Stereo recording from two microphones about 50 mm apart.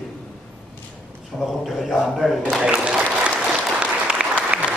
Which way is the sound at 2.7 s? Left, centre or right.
Right.